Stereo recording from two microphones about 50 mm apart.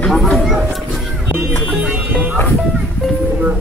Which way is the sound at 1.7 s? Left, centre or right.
Right.